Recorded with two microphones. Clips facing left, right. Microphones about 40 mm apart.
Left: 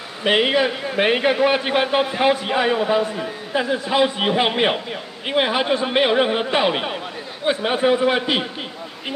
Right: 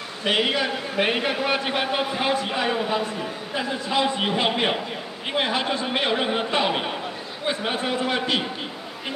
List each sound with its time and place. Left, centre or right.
0.2 s a man's voice: centre